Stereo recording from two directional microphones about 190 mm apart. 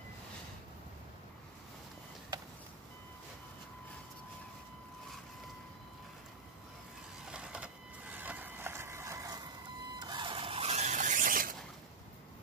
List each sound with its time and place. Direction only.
7.2 s vehicle: 5° right (ahead or behind)
9.9 s printer: 25° right (ahead or behind); by 11.5 s 45° right (ahead or behind)